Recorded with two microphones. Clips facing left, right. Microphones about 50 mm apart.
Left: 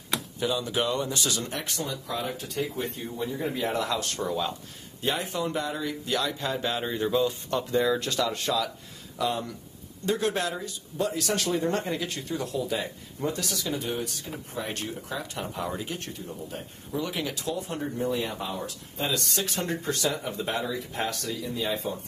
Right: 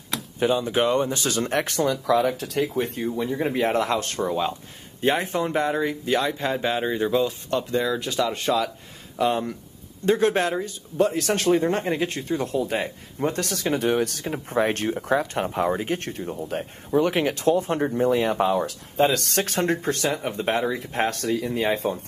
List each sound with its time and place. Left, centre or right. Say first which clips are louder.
0.4 s speech: right 7 dB; right
2.0 s speech: right 11 dB; right
2.8 s speech: right 6 dB; right; by 7.2 s centre
7.4 s speech: right 1 dB; centre
8.1 s speech: right 3 dB; right
9.2 s speech: right 6 dB; right